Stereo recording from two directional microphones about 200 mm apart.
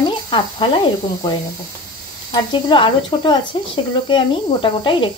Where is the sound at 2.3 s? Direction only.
25° left (ahead or behind).